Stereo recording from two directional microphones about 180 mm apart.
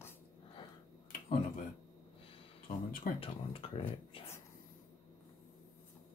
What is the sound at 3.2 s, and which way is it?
Speech, 30° left (ahead or behind).